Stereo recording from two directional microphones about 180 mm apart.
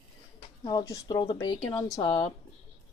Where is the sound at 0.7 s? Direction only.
20° left (ahead or behind).